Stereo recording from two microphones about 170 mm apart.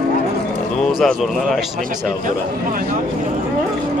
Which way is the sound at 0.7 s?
Centre (ahead or behind).